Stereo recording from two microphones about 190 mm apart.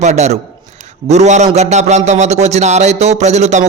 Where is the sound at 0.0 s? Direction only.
35° right (ahead or behind).